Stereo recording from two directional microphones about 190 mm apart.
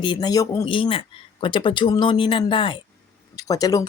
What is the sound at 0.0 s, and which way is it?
A woman's voice, 25° left (ahead or behind).